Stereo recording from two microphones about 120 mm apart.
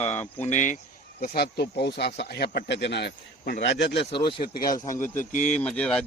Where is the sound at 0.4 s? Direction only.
85° left.